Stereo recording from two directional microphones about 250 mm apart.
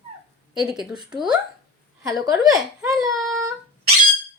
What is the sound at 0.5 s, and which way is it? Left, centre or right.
Speech, centre.